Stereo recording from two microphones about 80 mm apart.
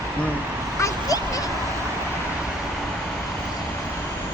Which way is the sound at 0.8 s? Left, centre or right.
Left.